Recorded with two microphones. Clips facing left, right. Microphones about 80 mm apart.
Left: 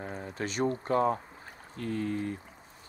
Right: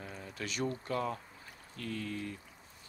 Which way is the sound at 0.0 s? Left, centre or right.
Left.